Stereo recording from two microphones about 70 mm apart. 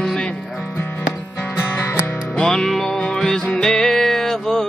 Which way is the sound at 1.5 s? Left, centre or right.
Left.